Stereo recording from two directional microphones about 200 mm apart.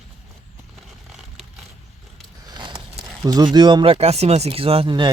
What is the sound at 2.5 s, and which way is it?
Speech, 20° right (ahead or behind).